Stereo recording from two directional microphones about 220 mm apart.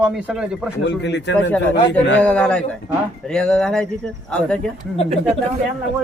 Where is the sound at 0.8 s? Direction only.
55° left (ahead or behind).